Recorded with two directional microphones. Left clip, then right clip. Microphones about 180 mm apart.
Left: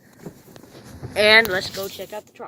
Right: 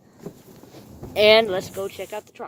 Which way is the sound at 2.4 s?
20° right (ahead or behind).